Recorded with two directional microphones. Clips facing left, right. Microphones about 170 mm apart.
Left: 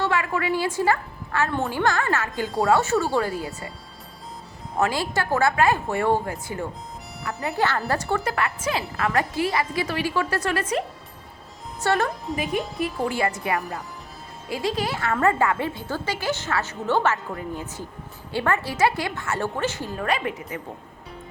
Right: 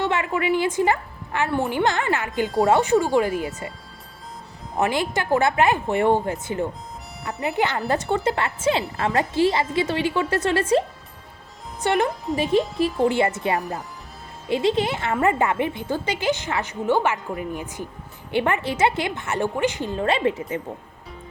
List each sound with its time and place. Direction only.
0.0 s a woman's voice: 20° right (ahead or behind)
4.8 s a woman's voice: 20° right (ahead or behind)
11.8 s a woman's voice: 15° right (ahead or behind)